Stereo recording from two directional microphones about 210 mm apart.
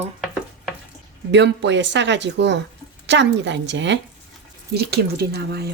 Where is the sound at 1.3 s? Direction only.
60° right (ahead or behind).